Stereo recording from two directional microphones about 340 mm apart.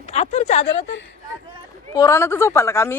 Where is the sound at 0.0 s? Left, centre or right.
Centre.